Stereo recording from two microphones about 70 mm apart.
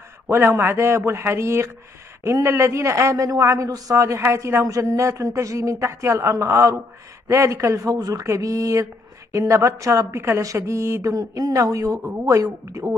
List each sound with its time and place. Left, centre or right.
0.3 s a man's voice: right